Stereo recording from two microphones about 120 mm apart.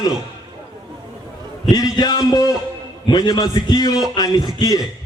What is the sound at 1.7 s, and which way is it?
A man's voice, 35° left (ahead or behind).